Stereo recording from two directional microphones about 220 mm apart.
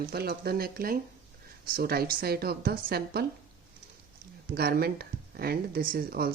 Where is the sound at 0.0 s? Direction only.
45° right (ahead or behind).